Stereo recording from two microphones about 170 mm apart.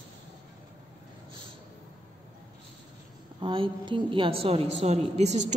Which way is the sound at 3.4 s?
30° right (ahead or behind).